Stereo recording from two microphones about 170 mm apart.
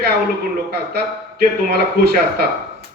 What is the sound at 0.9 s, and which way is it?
A man's voice, 70° right (ahead or behind).